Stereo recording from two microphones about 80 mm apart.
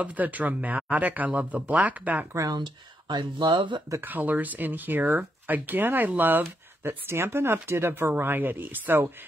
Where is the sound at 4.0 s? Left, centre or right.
Right.